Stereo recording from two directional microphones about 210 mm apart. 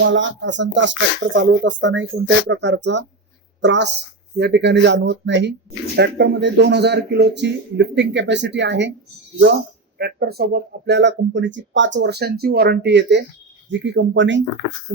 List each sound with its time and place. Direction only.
0.0 s speech: 60° right (ahead or behind)
10.0 s speech: 50° right (ahead or behind)